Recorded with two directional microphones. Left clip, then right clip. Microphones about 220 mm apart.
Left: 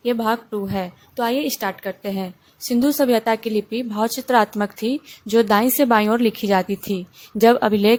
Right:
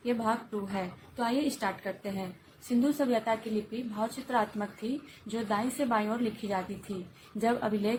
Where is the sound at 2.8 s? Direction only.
45° left (ahead or behind).